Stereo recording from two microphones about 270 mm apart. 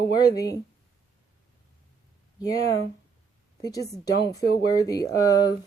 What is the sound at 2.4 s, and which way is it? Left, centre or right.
Speech, centre.